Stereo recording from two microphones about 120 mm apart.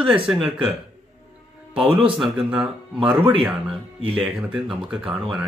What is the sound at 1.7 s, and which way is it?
Speech, 45° right (ahead or behind).